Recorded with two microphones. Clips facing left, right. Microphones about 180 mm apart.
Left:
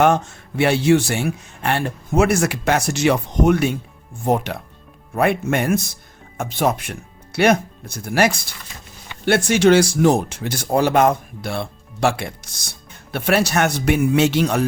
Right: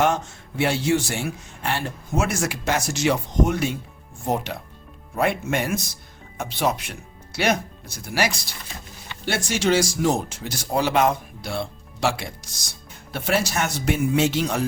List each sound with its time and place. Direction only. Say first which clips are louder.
0.0 s speech: left 5 dB; 60° left (ahead or behind)